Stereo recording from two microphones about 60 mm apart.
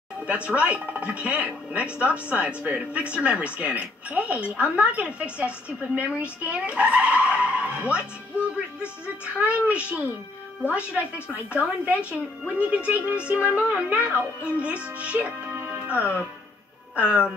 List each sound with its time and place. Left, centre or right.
0.3 s speech: right